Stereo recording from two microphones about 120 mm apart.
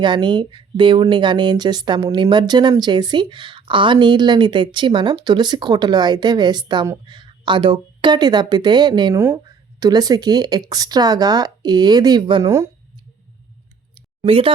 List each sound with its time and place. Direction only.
0.0 s speech: 40° right (ahead or behind)
9.1 s speech: 20° right (ahead or behind)
9.8 s speech: 30° right (ahead or behind)
12.4 s speech: 25° right (ahead or behind)
13.9 s a sound: 50° right (ahead or behind)